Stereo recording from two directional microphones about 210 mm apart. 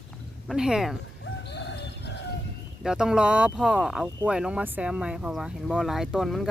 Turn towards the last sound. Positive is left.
turn(degrees=0)  # may be behind; listen again after turning